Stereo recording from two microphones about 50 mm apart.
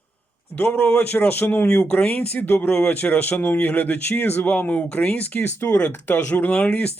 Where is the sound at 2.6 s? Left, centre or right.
Left.